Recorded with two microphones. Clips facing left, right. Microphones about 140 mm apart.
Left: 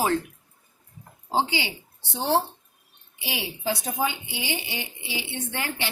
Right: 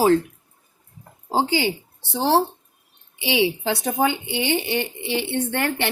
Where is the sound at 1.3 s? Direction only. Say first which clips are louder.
Right 5 dB; 45° right (ahead or behind).